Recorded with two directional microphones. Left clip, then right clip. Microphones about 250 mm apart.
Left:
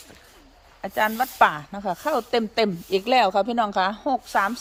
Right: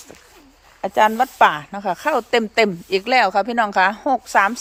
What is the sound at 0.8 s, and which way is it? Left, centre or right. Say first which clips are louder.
Speech: right 7 dB; centre.